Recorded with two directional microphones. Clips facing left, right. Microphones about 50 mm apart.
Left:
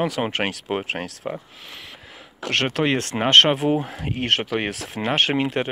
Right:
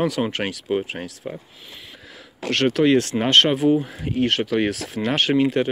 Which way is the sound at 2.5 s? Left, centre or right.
Left.